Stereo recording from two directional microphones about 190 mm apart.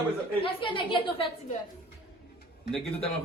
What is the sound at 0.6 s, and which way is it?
Speech, 25° left (ahead or behind).